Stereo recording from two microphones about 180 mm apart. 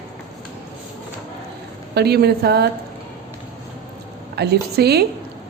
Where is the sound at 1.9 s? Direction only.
60° right (ahead or behind).